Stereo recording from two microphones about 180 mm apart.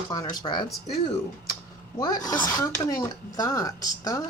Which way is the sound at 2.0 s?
20° left (ahead or behind).